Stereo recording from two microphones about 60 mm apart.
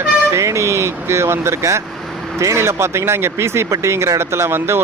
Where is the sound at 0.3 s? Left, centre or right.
Right.